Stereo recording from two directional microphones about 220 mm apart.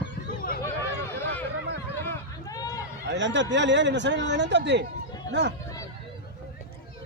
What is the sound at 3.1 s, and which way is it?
Speech, 55° right (ahead or behind).